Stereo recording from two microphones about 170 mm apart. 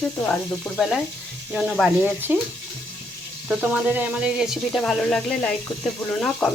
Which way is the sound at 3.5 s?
5° right (ahead or behind).